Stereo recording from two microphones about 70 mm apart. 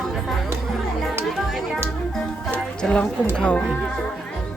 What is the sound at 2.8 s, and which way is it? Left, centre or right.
Speech, centre.